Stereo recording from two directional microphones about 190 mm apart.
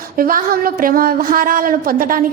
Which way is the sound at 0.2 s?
50° right (ahead or behind).